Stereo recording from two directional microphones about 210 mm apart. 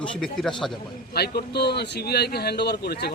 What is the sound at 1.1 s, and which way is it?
A man's voice, 50° left (ahead or behind).